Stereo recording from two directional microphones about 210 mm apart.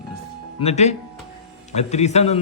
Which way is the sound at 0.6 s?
30° left (ahead or behind).